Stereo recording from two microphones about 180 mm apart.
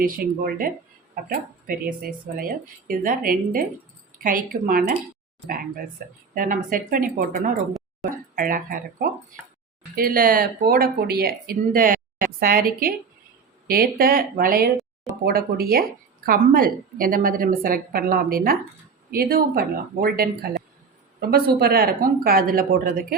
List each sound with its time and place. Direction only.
0.0 s a woman's voice: 50° right (ahead or behind)